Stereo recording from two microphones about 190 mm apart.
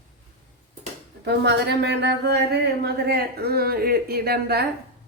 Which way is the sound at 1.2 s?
60° right (ahead or behind).